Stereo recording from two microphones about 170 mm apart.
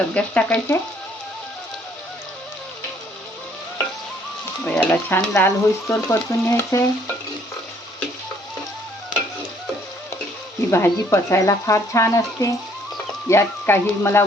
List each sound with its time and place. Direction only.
0.1 s speech: 10° left (ahead or behind)
4.6 s speech: 10° left (ahead or behind)
10.7 s speech: 15° left (ahead or behind)